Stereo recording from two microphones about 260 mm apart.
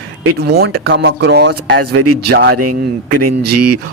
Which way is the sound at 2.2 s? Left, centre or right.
Right.